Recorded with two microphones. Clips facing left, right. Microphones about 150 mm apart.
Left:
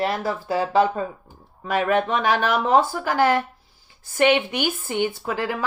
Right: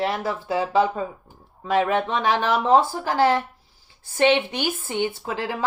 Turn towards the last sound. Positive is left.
turn(degrees=-25)  # may be behind; listen again after turning